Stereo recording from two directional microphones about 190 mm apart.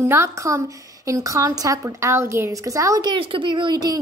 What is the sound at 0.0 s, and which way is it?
A woman's voice, 15° right (ahead or behind).